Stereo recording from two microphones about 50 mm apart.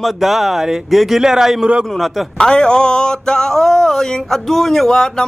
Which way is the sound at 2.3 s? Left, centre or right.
Centre.